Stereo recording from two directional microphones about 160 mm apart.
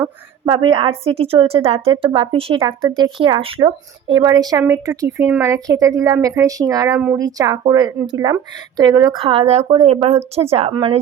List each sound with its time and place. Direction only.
0.4 s a woman's voice: 30° right (ahead or behind)